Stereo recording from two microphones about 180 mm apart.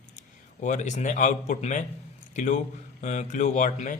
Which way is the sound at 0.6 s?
45° left (ahead or behind).